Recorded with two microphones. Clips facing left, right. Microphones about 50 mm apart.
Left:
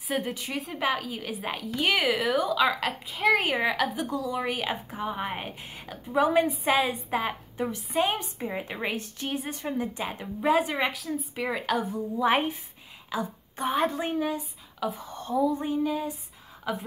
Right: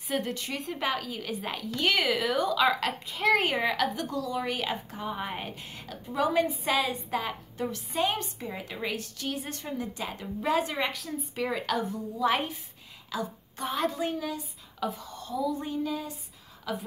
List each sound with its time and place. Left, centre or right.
0.1 s a woman's voice: centre; by 9.5 s left
9.5 s a woman's voice: centre
11.0 s a woman's voice: centre
12.3 s a woman's voice: left
15.5 s a woman's voice: centre